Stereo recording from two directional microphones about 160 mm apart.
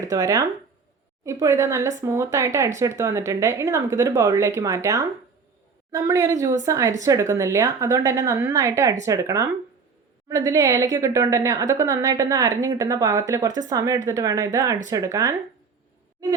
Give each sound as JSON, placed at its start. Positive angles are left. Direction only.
{"t": 0.1, "sound": "a woman's voice", "side_deg": -20}